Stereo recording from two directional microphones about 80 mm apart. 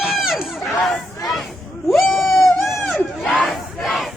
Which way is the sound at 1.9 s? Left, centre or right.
Centre.